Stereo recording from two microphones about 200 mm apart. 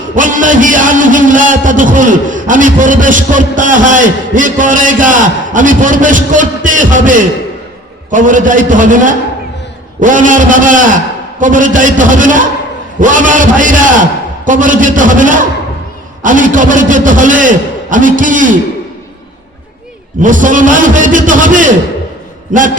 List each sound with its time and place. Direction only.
0.1 s a man's voice: 40° right (ahead or behind)
20.2 s a man's voice: 40° right (ahead or behind)